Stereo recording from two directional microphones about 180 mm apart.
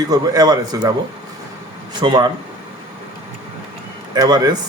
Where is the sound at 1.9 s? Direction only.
25° right (ahead or behind).